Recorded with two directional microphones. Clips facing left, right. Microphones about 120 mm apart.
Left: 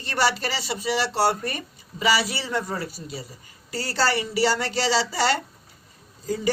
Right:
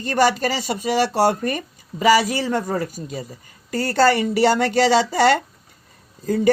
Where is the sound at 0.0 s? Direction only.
45° right (ahead or behind).